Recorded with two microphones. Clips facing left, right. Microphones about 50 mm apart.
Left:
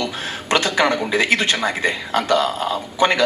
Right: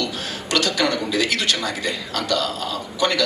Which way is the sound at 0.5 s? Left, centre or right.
Left.